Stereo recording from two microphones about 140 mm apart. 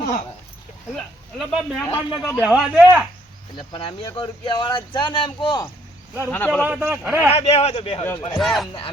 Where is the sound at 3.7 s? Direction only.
40° left (ahead or behind).